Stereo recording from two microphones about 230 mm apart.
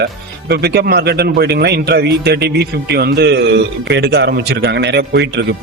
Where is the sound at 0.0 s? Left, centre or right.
Right.